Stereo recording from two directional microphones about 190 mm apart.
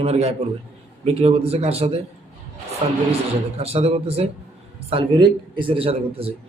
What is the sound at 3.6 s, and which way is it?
A man's voice, 30° right (ahead or behind).